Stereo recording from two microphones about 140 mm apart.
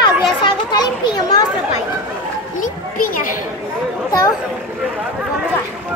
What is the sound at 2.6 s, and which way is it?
Speech, 75° left (ahead or behind).